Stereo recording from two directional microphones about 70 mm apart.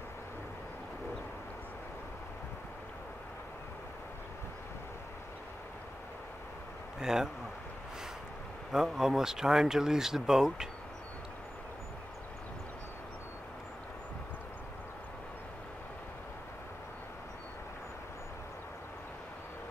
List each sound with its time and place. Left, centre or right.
7.0 s speech: centre
8.7 s speech: centre